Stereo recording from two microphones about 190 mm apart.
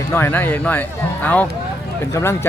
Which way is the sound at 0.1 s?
10° left (ahead or behind).